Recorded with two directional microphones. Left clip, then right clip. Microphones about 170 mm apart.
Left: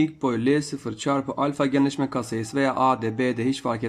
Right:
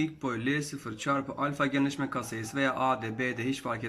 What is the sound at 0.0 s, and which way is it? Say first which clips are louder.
A man's voice: left 8 dB; 30° left (ahead or behind).